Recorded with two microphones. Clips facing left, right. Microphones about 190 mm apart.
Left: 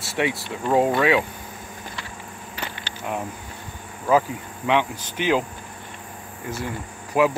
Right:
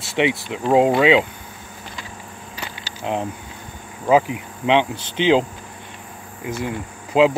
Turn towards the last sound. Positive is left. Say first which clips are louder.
# right 4 dB
turn(degrees=-20)  # may be behind; listen again after turning